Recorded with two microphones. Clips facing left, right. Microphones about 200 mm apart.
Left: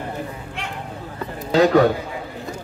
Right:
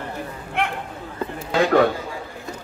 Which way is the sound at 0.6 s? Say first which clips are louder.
Right 9 dB; 60° right (ahead or behind).